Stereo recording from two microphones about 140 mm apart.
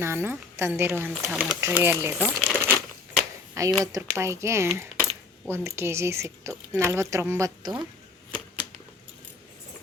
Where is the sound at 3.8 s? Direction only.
25° right (ahead or behind).